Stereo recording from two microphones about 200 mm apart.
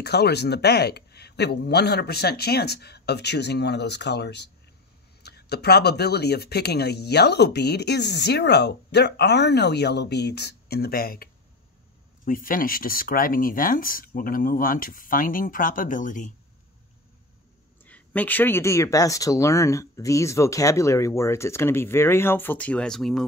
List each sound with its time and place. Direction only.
0.0 s speech: 55° left (ahead or behind)
12.3 s speech: 45° left (ahead or behind)
17.8 s speech: 10° left (ahead or behind)